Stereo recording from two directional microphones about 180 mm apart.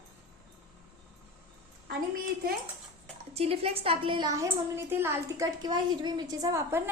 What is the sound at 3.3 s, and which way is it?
A woman's voice, 35° right (ahead or behind).